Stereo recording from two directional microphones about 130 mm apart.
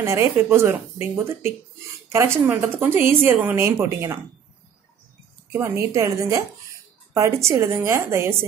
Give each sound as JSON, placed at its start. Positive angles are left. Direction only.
{"t": 0.0, "sound": "speech", "side_deg": -20}
{"t": 5.5, "sound": "speech", "side_deg": -20}